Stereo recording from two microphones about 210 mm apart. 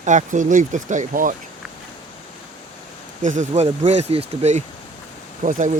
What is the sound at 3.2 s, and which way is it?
Speech, 35° right (ahead or behind).